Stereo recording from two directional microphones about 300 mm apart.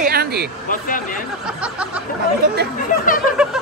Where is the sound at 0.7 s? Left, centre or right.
Left.